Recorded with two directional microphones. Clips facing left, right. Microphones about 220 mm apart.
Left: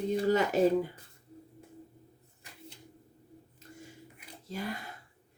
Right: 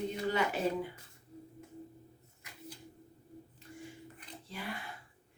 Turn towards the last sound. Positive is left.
turn(degrees=40)  # may be behind; listen again after turning